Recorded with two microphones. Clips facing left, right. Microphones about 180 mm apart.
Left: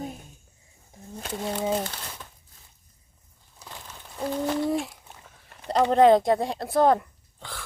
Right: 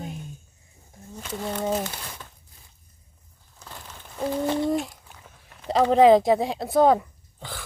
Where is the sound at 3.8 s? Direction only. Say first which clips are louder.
Right 2 dB; 5° right (ahead or behind).